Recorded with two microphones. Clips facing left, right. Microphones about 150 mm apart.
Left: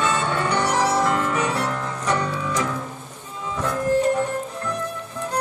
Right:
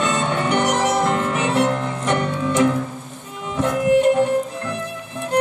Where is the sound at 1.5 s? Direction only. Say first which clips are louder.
Right 6 dB; 20° right (ahead or behind).